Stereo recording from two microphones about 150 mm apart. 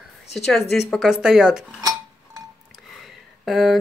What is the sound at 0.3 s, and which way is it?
Speech, centre (ahead or behind).